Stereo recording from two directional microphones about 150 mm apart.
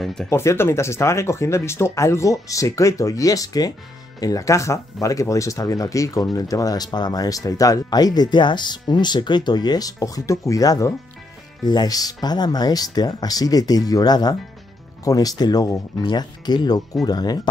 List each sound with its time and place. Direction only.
0.0 s speech: 5° left (ahead or behind)
0.3 s speech: 15° left (ahead or behind)